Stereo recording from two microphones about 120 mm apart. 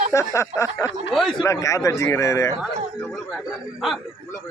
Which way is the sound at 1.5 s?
25° left (ahead or behind).